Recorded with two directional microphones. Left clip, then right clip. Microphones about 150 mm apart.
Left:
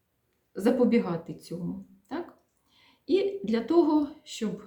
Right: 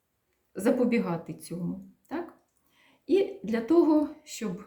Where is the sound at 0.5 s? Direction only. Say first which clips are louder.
Left 2 dB; 15° left (ahead or behind).